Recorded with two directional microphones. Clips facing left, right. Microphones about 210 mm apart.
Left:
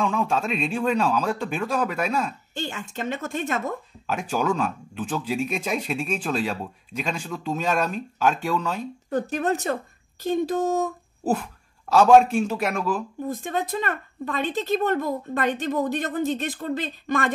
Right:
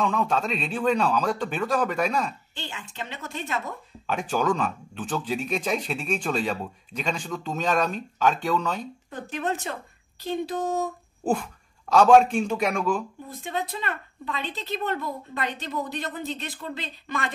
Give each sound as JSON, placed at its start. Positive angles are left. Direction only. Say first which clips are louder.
{"t": 0.0, "sound": "speech", "louder": "left 1 dB", "side_deg": 5}
{"t": 2.5, "sound": "speech", "louder": "left 7 dB", "side_deg": 45}
{"t": 4.1, "sound": "speech", "louder": "even", "side_deg": 5}
{"t": 9.1, "sound": "speech", "louder": "left 6 dB", "side_deg": 40}
{"t": 11.2, "sound": "a man's voice", "louder": "left 1 dB", "side_deg": 5}
{"t": 13.3, "sound": "speech", "louder": "left 4 dB", "side_deg": 45}